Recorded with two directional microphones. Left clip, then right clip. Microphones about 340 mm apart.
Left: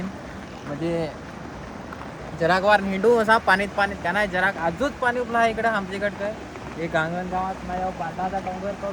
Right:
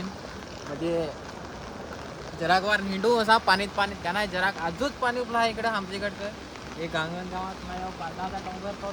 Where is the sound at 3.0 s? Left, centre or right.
Centre.